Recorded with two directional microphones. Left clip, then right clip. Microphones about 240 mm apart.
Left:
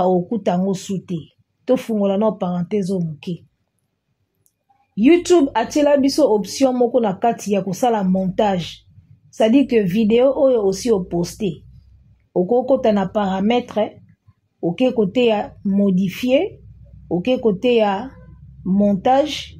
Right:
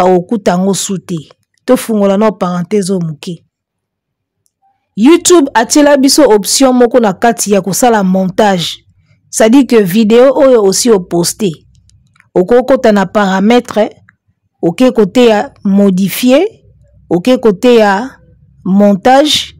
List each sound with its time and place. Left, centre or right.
0.0 s speech: right
4.9 s speech: right